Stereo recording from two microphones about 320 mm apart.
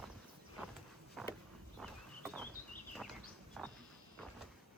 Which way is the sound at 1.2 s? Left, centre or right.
Centre.